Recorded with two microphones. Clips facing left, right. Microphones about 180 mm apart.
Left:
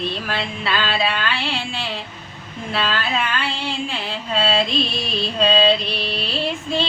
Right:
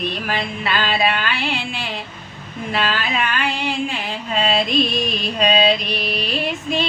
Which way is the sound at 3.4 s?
15° right (ahead or behind).